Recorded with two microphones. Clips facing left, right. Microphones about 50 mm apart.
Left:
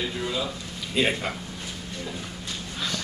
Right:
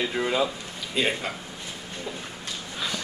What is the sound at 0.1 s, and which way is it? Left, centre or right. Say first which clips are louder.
Speech: right 5 dB; right.